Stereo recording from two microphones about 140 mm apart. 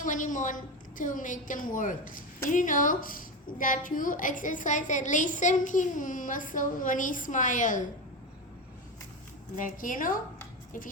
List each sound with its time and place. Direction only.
0.0 s a woman's voice: 65° left (ahead or behind)
9.6 s a woman's voice: 75° left (ahead or behind)